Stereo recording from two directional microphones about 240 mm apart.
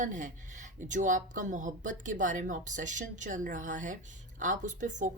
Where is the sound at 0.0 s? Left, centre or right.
Right.